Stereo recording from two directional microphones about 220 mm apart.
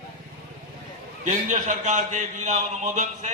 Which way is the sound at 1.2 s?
35° right (ahead or behind).